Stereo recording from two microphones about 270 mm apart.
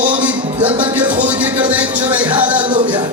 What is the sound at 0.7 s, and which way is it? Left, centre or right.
Speech, centre.